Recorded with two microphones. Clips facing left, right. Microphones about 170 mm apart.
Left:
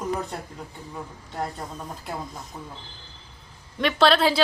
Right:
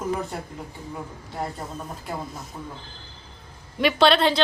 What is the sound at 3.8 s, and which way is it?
Speech, 5° right (ahead or behind).